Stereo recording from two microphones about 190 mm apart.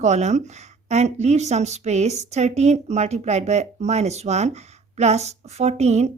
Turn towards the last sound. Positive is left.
turn(degrees=-35)  # may be behind; listen again after turning